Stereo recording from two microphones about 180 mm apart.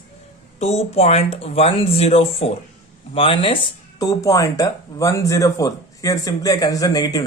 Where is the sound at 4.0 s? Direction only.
20° left (ahead or behind).